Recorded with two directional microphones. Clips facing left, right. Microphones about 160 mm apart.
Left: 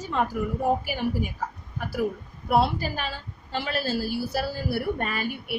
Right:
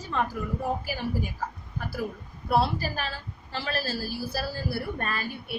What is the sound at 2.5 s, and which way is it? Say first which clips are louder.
Speech: left 2 dB; 20° left (ahead or behind).